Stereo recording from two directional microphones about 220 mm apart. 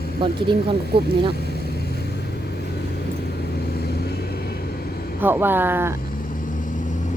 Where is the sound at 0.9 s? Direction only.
45° right (ahead or behind).